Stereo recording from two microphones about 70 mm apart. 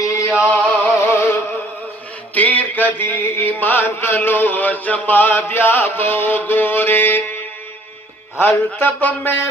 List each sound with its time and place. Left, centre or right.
0.0 s a sound: left
0.8 s music: left
2.3 s chant: left
8.4 s chant: left